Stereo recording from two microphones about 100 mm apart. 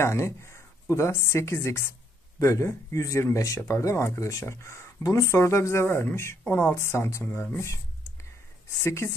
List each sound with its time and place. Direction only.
0.0 s speech: 30° left (ahead or behind)
8.8 s speech: 25° left (ahead or behind)